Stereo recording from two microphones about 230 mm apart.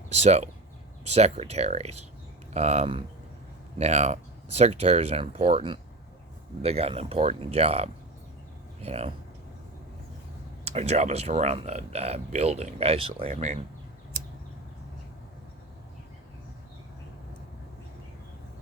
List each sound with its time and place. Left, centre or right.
0.1 s speech: right
10.7 s speech: right